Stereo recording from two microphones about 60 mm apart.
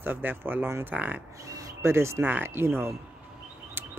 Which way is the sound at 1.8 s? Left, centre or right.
Right.